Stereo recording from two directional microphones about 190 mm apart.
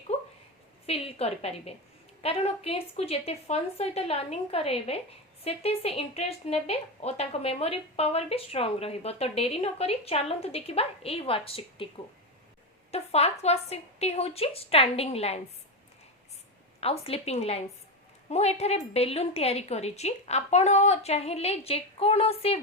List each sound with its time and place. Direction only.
0.9 s speech: 30° left (ahead or behind)
12.9 s speech: 35° left (ahead or behind)
16.8 s speech: 30° left (ahead or behind)